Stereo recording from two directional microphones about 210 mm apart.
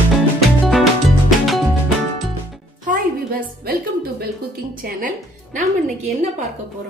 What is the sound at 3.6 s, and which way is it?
Music, 45° right (ahead or behind).